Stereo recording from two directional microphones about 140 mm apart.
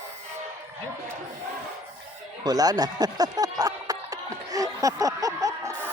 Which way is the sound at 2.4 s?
25° right (ahead or behind).